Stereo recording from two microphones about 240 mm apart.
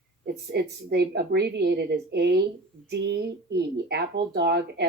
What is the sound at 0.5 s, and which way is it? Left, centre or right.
Speech, right.